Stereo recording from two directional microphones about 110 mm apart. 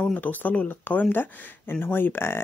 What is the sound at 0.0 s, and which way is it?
Speech, 15° left (ahead or behind).